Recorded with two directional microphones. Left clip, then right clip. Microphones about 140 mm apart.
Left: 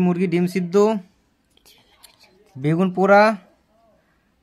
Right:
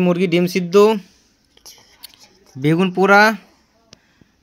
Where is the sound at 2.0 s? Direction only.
25° right (ahead or behind).